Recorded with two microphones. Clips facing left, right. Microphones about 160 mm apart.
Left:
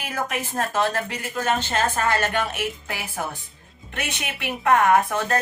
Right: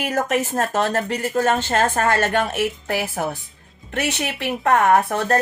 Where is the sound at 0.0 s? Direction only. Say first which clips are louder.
Right 7 dB; 40° right (ahead or behind).